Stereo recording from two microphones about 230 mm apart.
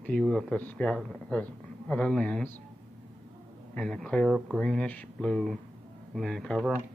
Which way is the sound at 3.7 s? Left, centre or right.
Centre.